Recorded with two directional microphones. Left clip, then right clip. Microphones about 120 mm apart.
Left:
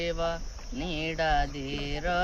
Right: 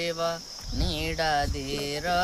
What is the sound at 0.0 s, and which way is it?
Music, 25° right (ahead or behind).